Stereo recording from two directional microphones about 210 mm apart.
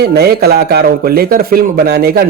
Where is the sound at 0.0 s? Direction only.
50° right (ahead or behind).